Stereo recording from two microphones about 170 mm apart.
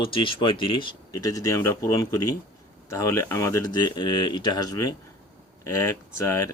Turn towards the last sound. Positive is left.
turn(degrees=15)  # may be behind; listen again after turning